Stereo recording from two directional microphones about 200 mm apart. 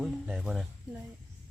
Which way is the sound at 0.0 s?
Centre (ahead or behind).